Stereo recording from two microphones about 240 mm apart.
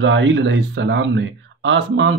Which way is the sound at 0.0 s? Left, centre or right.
Right.